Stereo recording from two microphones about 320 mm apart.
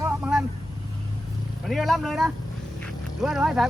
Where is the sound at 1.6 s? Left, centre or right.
Centre.